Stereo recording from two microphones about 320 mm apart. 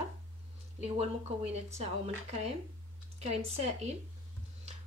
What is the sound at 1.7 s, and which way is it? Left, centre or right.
Speech, centre.